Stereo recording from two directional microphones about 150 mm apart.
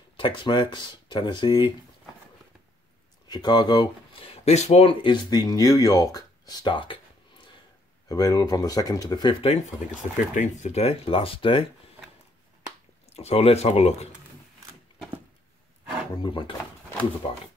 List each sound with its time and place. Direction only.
0.2 s speech: 35° left (ahead or behind)
3.3 s speech: 30° left (ahead or behind)
4.5 s speech: 45° left (ahead or behind)
9.8 s speech: 55° left (ahead or behind); by 11.7 s 35° left (ahead or behind)
13.1 s speech: 45° left (ahead or behind)
16.2 s speech: 35° left (ahead or behind)